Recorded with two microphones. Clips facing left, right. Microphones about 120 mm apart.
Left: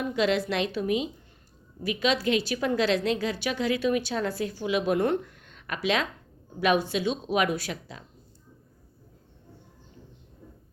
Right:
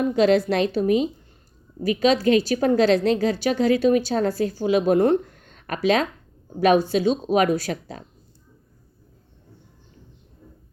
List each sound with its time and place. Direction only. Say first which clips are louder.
0.0 s a woman's voice: right 7 dB; 40° right (ahead or behind)